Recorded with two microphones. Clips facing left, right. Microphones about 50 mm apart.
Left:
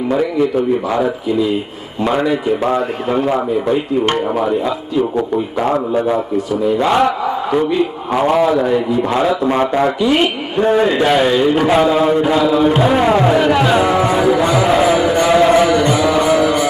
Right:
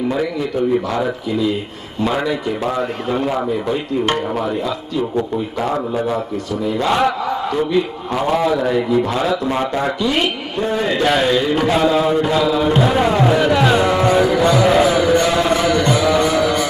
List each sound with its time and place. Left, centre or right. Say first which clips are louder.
0.9 s a man's voice: left 4 dB; centre
4.9 s a man's voice: left 4 dB; left
10.6 s a man's voice: left 7 dB; left
10.8 s a man's voice: left 3 dB; centre
15.6 s music: left 2 dB; centre